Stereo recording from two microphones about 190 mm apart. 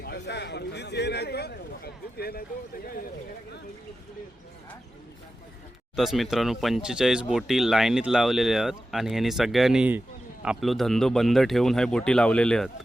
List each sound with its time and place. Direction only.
0.0 s a man's voice: 60° left (ahead or behind)
6.0 s speech: centre (ahead or behind)